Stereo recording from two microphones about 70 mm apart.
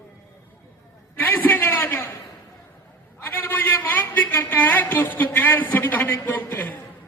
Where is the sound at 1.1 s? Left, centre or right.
Left.